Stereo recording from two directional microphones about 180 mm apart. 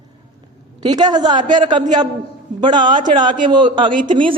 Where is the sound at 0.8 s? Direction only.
25° right (ahead or behind).